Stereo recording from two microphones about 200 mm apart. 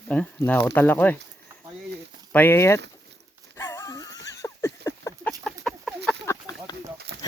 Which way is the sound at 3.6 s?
15° left (ahead or behind).